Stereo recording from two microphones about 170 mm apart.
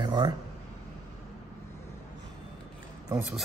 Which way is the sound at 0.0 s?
25° right (ahead or behind).